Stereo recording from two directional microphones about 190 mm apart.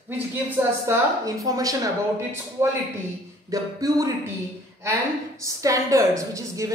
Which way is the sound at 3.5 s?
20° right (ahead or behind).